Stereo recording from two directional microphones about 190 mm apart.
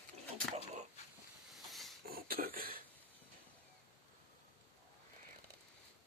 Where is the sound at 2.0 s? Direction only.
50° right (ahead or behind).